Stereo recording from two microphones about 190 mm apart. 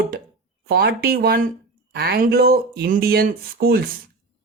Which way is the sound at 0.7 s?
55° right (ahead or behind).